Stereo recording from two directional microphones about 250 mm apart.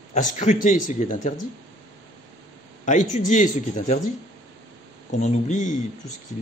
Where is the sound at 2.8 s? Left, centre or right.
Left.